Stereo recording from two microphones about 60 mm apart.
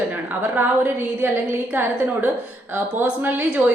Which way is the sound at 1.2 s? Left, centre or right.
Right.